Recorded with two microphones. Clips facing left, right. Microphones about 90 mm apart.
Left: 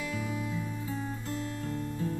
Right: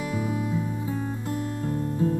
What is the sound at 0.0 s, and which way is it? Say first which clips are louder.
Music: right 6 dB; 25° right (ahead or behind).